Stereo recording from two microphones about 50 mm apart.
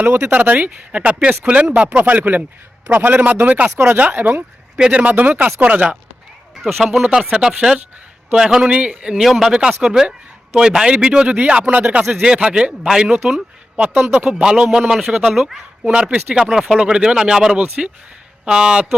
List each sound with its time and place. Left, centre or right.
0.3 s speech: right
4.8 s speech: right
6.6 s speech: centre
7.0 s speech: centre
8.7 s speech: right
9.2 s speech: centre
9.5 s speech: centre
12.2 s speech: centre
13.7 s speech: right
14.4 s speech: centre
17.5 s speech: right
18.4 s speech: centre